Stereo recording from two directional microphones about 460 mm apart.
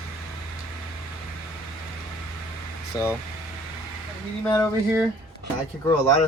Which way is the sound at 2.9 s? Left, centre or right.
Centre.